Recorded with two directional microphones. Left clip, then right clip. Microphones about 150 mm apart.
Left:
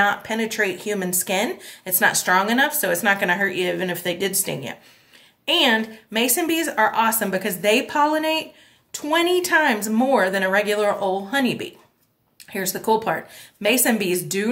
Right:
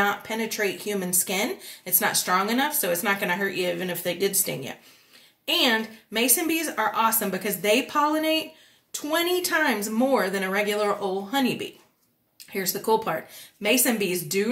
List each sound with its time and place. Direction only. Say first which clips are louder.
0.0 s speech: left 5 dB; 50° left (ahead or behind)
5.4 s speech: left 4 dB; 45° left (ahead or behind)